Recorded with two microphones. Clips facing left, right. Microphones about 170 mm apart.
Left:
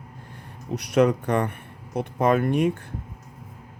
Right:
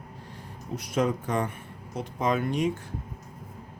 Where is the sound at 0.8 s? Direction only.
70° left (ahead or behind).